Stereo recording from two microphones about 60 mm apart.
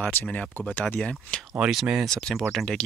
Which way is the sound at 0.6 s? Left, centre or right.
Left.